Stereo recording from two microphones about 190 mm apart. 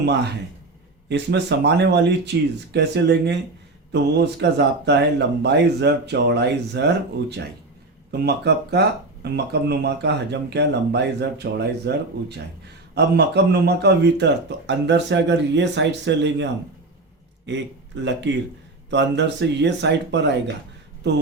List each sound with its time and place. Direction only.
0.0 s a man's voice: 65° right (ahead or behind)